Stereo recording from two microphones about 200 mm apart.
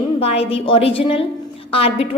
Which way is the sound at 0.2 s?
30° left (ahead or behind).